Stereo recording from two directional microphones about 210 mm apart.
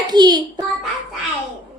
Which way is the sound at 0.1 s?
20° right (ahead or behind).